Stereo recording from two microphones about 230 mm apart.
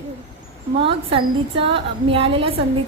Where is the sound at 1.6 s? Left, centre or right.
Right.